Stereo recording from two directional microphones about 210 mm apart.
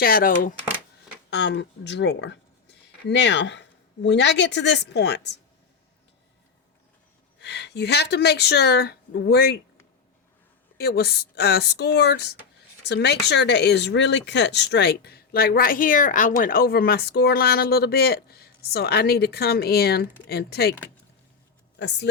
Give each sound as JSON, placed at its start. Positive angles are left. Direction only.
{"t": 0.0, "sound": "speech", "side_deg": 45}
{"t": 1.3, "sound": "speech", "side_deg": 55}
{"t": 7.3, "sound": "speech", "side_deg": 55}
{"t": 10.8, "sound": "speech", "side_deg": 50}
{"t": 21.8, "sound": "speech", "side_deg": 55}